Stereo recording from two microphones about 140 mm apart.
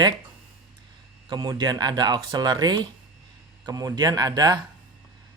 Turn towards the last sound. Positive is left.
turn(degrees=-25)  # may be behind; listen again after turning